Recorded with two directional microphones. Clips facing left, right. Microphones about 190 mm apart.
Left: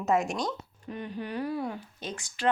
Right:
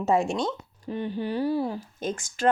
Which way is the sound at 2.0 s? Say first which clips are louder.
Right 7 dB; 45° right (ahead or behind).